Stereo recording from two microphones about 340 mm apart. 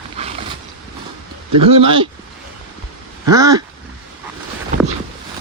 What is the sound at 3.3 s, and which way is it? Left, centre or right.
Speech, centre.